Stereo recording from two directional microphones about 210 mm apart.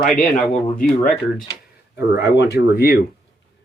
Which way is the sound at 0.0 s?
40° left (ahead or behind).